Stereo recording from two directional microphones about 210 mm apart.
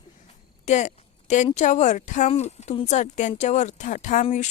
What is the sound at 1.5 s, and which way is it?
A woman's voice, 35° left (ahead or behind).